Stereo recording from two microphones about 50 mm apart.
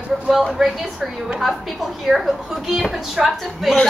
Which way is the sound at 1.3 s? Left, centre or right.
Centre.